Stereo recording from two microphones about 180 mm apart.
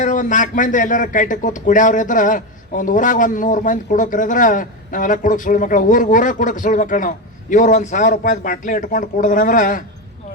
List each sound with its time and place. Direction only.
0.0 s speech: 45° left (ahead or behind)